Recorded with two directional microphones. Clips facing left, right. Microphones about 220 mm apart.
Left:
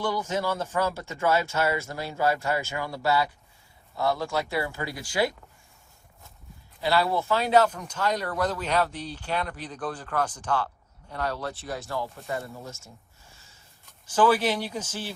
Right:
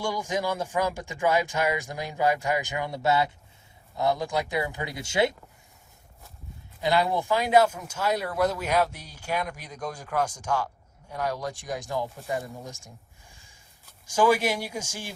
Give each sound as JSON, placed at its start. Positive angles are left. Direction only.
{"t": 0.0, "sound": "speech", "side_deg": -15}
{"t": 6.8, "sound": "speech", "side_deg": -15}